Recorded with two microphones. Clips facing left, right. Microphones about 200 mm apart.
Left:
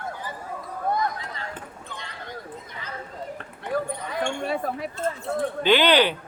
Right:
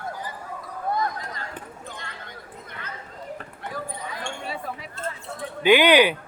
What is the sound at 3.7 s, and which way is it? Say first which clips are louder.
Basketball bounce: left 6 dB; 60° left (ahead or behind).